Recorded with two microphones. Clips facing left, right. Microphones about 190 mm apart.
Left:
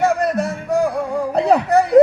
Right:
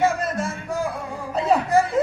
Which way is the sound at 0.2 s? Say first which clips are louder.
Left 7 dB; 70° left (ahead or behind).